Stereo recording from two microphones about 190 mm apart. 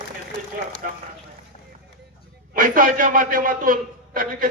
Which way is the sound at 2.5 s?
45° right (ahead or behind).